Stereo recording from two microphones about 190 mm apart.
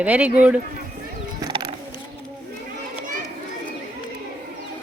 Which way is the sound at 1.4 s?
25° right (ahead or behind).